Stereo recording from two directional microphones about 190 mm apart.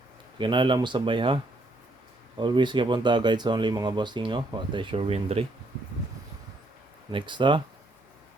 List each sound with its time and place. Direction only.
0.3 s speech: 25° right (ahead or behind)
2.4 s speech: 25° right (ahead or behind)
7.1 s speech: 25° right (ahead or behind)